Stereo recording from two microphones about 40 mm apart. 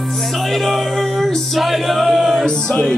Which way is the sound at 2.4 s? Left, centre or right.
Left.